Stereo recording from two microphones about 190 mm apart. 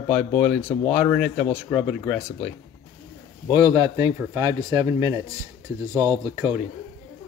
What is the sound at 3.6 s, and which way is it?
A man's voice, 20° right (ahead or behind).